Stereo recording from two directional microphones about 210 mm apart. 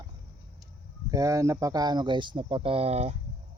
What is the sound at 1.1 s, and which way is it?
Speech, 15° right (ahead or behind).